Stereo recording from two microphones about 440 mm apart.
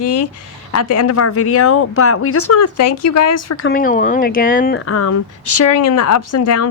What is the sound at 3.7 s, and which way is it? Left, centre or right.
Speech, centre.